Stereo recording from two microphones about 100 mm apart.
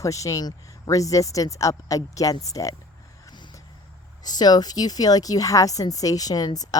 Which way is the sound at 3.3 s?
45° left (ahead or behind).